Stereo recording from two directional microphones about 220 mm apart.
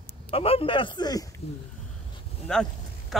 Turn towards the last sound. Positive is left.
turn(degrees=5)  # may be behind; listen again after turning